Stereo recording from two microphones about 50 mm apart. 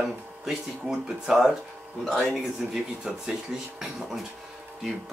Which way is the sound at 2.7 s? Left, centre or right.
Centre.